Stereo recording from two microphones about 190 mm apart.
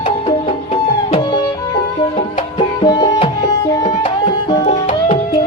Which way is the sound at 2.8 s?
20° left (ahead or behind).